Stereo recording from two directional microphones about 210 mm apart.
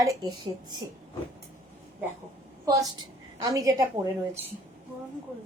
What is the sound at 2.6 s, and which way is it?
A woman's voice, 15° right (ahead or behind).